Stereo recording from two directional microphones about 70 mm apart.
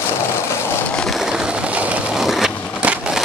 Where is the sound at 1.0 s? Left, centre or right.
Centre.